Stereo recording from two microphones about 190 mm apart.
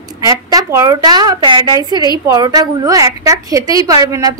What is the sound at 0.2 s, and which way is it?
A woman's voice, 20° right (ahead or behind).